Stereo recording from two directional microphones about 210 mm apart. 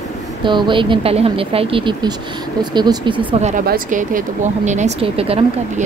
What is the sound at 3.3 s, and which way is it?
Speech, 35° right (ahead or behind).